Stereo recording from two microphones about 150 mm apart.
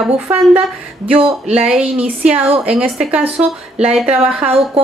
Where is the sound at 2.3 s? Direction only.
40° right (ahead or behind).